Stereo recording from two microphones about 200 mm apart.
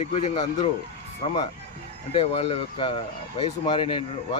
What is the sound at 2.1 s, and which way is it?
Speech, 30° left (ahead or behind).